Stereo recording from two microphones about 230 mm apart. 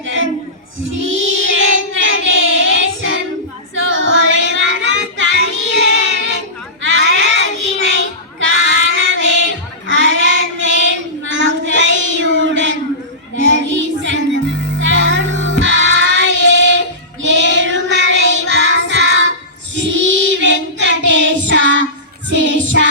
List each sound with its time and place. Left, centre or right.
0.0 s a sound: right
0.9 s child singing: right
13.3 s music: right
17.2 s child singing: right